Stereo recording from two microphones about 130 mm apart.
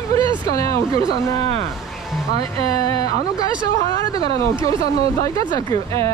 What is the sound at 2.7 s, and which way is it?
Speech, 30° left (ahead or behind).